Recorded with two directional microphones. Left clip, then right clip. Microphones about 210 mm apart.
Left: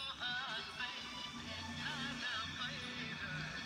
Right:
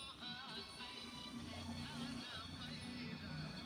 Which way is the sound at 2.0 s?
50° left (ahead or behind).